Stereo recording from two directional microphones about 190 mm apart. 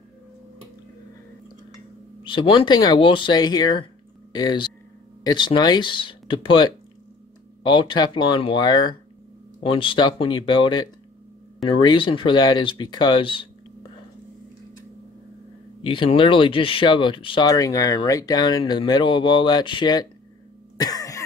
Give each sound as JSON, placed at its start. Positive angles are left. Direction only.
{"t": 2.2, "sound": "speech", "side_deg": 25}
{"t": 15.8, "sound": "speech", "side_deg": 25}
{"t": 20.8, "sound": "cough", "side_deg": 20}